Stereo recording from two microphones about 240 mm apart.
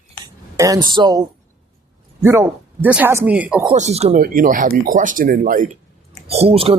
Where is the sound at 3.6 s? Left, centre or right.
Right.